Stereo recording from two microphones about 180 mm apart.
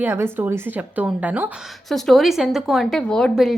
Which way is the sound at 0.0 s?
10° right (ahead or behind).